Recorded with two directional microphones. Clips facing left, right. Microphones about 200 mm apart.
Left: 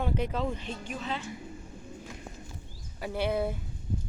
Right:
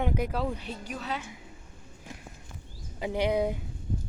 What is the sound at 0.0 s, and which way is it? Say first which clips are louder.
Speech: right 1 dB; 10° right (ahead or behind).